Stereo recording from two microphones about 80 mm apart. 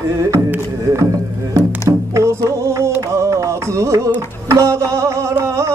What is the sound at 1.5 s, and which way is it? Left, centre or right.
Music, right.